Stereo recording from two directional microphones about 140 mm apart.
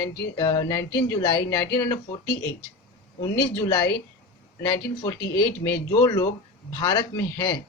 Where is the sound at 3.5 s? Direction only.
30° left (ahead or behind).